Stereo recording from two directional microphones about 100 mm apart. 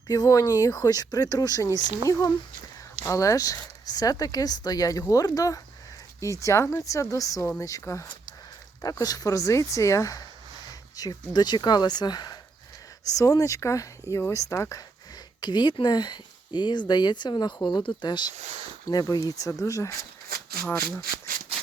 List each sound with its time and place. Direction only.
0.1 s speech: 35° left (ahead or behind)
15.4 s speech: 45° left (ahead or behind); by 21.0 s 30° left (ahead or behind)